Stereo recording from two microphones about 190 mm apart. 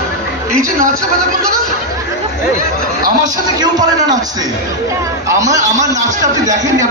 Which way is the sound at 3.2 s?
20° right (ahead or behind).